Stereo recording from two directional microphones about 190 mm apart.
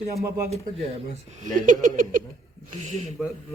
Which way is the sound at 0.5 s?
35° right (ahead or behind).